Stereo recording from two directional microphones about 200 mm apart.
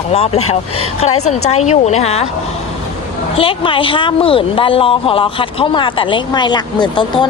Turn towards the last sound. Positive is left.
turn(degrees=20)  # may be behind; listen again after turning